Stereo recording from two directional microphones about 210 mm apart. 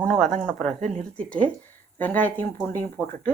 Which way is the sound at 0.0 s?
5° left (ahead or behind).